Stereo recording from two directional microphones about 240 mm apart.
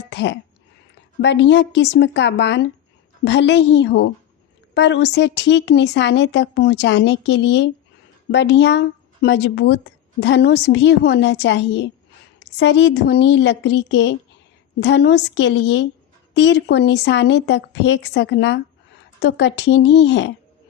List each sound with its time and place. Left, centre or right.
0.1 s speech: left